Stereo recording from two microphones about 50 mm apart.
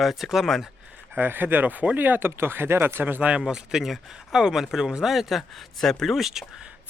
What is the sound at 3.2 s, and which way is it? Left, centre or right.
Speech, right.